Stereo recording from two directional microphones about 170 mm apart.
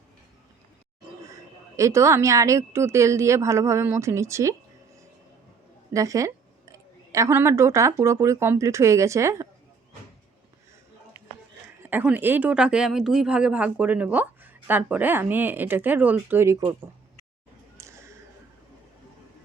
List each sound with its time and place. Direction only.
1.2 s speech: 20° right (ahead or behind)
5.9 s a woman's voice: 20° right (ahead or behind)
11.8 s speech: 10° right (ahead or behind)
17.7 s a sound: 15° right (ahead or behind)